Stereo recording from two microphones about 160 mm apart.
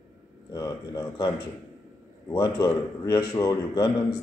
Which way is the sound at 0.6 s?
25° left (ahead or behind).